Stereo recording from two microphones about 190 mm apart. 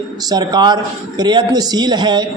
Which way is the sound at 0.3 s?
20° right (ahead or behind).